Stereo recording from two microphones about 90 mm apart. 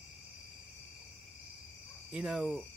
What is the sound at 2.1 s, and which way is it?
Cricket, 5° right (ahead or behind).